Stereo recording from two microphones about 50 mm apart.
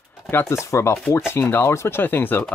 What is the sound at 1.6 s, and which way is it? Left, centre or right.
Speech, left.